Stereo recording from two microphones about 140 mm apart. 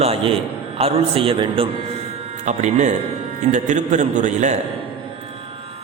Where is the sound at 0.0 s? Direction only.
45° right (ahead or behind).